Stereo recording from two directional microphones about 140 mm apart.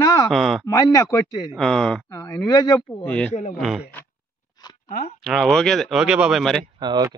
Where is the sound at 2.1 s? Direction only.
25° left (ahead or behind).